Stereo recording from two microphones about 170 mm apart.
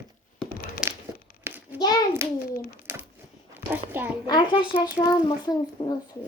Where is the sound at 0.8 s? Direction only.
5° right (ahead or behind).